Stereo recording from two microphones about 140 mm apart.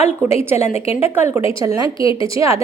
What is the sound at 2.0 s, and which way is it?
Speech, 40° left (ahead or behind).